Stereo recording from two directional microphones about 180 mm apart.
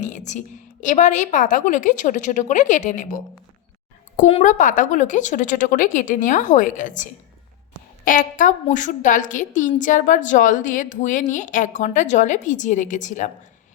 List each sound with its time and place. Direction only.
0.0 s a woman's voice: 40° left (ahead or behind)
4.3 s a woman's voice: 35° left (ahead or behind)
4.5 s a woman's voice: 45° left (ahead or behind)